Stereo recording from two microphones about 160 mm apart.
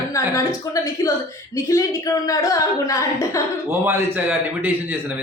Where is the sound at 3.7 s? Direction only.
15° right (ahead or behind).